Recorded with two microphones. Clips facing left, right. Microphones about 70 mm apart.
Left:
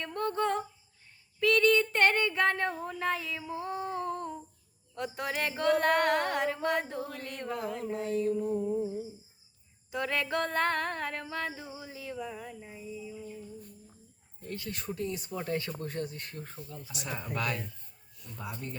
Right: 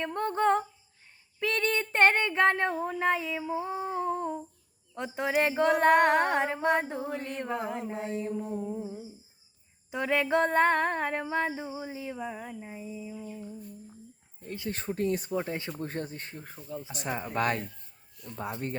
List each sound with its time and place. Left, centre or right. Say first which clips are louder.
0.0 s female singing: right 4 dB; right
14.4 s female singing: right 2 dB; right
14.9 s speech: right 8 dB; right
15.4 s female singing: right 1 dB; right
15.9 s speech: right 1 dB; right
16.3 s speech: right 3 dB; centre
16.9 s speech: right 4 dB; right